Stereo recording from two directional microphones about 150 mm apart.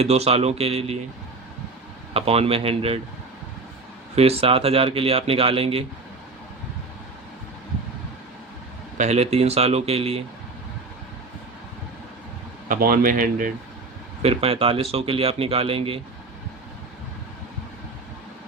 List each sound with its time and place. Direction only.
0.0 s speech: 45° right (ahead or behind)
2.1 s speech: 40° right (ahead or behind)
4.1 s speech: 40° right (ahead or behind)
9.0 s speech: 45° right (ahead or behind)
12.6 s speech: 70° right (ahead or behind)
14.2 s speech: 40° right (ahead or behind)